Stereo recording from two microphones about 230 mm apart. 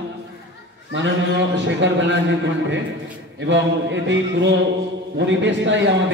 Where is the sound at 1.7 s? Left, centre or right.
Right.